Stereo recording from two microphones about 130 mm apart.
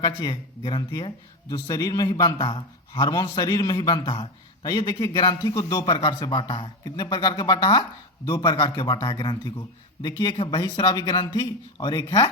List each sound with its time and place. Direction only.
0.0 s a man's voice: 35° left (ahead or behind)
10.6 s a man's voice: 35° left (ahead or behind)